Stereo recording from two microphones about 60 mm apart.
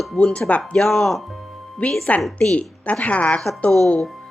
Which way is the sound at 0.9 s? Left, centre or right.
Centre.